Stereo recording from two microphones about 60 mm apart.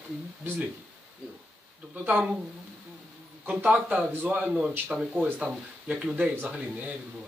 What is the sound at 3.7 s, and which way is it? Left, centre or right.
Speech, right.